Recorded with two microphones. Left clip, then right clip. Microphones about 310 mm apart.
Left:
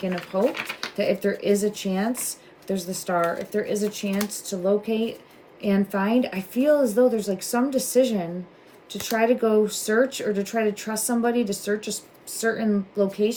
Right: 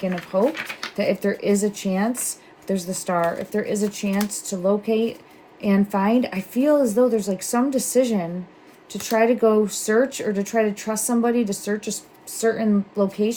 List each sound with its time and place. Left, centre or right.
0.9 s speech: centre